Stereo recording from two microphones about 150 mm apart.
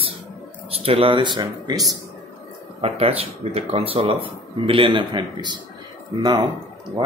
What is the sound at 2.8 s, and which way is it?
Speech, 40° right (ahead or behind).